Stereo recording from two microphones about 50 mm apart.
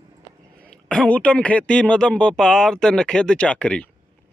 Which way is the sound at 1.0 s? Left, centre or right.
Left.